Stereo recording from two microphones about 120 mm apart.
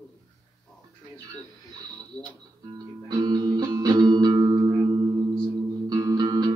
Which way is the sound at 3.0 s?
35° right (ahead or behind).